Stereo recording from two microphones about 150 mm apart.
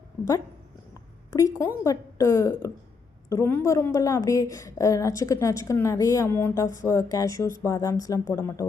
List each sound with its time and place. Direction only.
1.4 s a woman's voice: 20° left (ahead or behind)